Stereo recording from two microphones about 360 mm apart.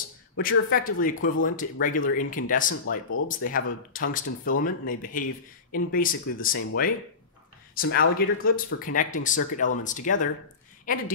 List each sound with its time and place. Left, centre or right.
0.4 s speech: left